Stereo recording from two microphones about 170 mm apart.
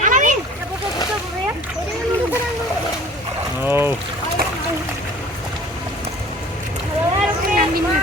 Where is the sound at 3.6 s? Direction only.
15° right (ahead or behind).